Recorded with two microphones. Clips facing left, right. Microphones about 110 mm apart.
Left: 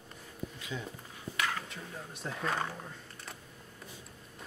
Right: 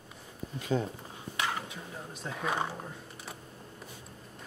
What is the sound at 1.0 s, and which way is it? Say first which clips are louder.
Dishes: right 1 dB; 25° right (ahead or behind).